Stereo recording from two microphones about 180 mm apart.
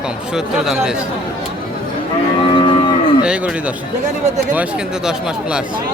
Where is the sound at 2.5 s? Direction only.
30° left (ahead or behind).